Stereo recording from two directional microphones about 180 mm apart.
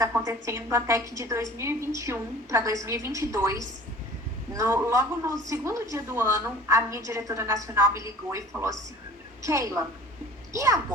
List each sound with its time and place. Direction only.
0.2 s a woman's voice: 15° right (ahead or behind)